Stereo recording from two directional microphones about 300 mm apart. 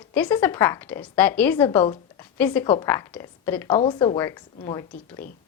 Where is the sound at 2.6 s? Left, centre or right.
Centre.